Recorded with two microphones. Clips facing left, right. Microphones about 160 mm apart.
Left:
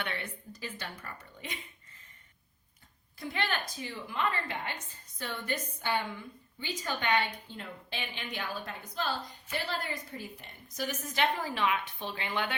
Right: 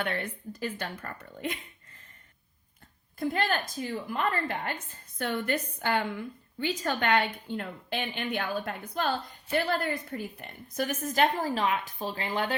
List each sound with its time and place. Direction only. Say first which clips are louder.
0.0 s a woman's voice: right 6 dB; 45° right (ahead or behind)
3.2 s a woman's voice: right 6 dB; 45° right (ahead or behind)